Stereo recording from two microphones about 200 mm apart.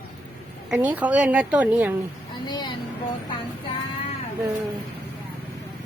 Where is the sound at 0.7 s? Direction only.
10° right (ahead or behind).